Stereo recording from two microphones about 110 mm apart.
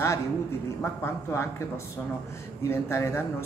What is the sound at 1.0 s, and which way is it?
Speech, 25° left (ahead or behind).